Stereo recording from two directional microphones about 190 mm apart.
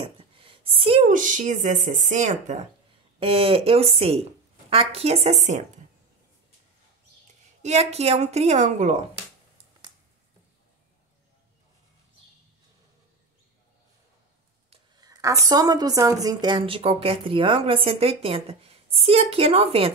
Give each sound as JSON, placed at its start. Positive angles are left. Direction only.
{"t": 0.0, "sound": "a woman's voice", "side_deg": -30}
{"t": 3.2, "sound": "speech", "side_deg": -30}
{"t": 7.6, "sound": "speech", "side_deg": -35}
{"t": 15.0, "sound": "a woman's voice", "side_deg": -20}